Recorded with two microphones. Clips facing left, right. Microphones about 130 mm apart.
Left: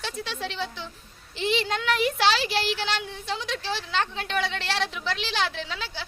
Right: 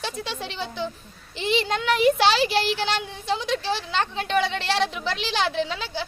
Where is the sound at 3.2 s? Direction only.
5° right (ahead or behind).